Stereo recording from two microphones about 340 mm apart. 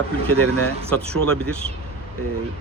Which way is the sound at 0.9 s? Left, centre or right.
Centre.